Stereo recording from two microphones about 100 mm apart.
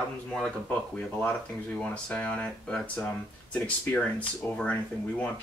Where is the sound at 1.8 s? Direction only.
10° left (ahead or behind).